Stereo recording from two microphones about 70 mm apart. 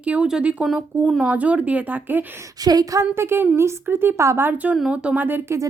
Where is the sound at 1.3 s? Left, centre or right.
Centre.